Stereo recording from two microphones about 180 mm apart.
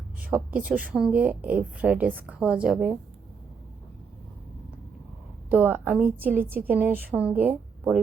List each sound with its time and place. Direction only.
0.2 s a woman's voice: 10° right (ahead or behind)
5.5 s a woman's voice: 10° right (ahead or behind)